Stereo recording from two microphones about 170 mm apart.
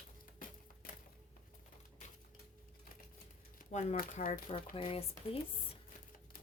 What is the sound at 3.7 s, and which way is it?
Speech, 50° left (ahead or behind).